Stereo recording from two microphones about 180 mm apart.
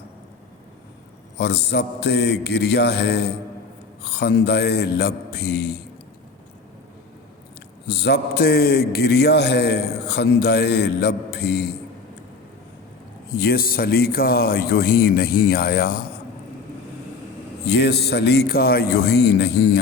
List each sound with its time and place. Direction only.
1.4 s a man's voice: 65° left (ahead or behind)
7.9 s a man's voice: 65° left (ahead or behind)
13.3 s a man's voice: 55° left (ahead or behind)
17.7 s a man's voice: 65° left (ahead or behind)